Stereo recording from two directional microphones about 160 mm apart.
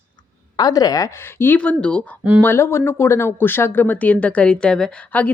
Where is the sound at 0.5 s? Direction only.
25° left (ahead or behind).